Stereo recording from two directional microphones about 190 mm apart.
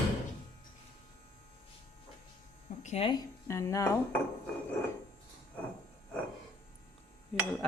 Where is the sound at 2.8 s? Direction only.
35° left (ahead or behind).